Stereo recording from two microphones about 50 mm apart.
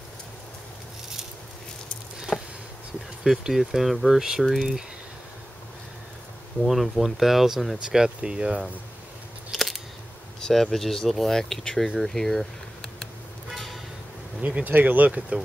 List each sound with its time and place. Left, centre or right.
2.3 s a sound: centre
3.3 s speech: centre
6.6 s speech: centre; by 8.7 s right
9.5 s scissors: centre
10.5 s speech: centre
12.1 s a sound: centre
14.4 s speech: right